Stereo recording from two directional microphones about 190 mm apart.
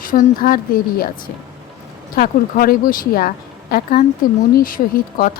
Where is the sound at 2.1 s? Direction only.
50° left (ahead or behind).